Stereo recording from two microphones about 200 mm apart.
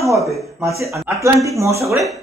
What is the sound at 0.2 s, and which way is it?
Speech, centre (ahead or behind).